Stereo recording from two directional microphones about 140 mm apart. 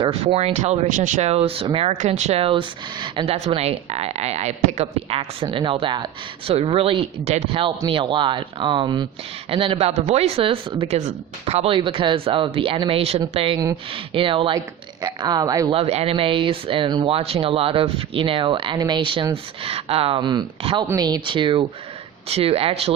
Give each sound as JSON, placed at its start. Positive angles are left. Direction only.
{"t": 0.0, "sound": "speech", "side_deg": -40}
{"t": 1.9, "sound": "speech", "side_deg": -55}
{"t": 3.2, "sound": "speech", "side_deg": -50}
{"t": 15.7, "sound": "speech", "side_deg": -45}
{"t": 20.8, "sound": "speech", "side_deg": -25}